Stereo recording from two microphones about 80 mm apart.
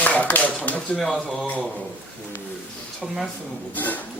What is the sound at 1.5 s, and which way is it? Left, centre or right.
Speech, centre.